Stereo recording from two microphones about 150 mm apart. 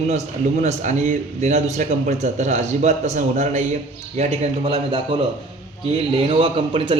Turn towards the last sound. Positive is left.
turn(degrees=-35)  # may be behind; listen again after turning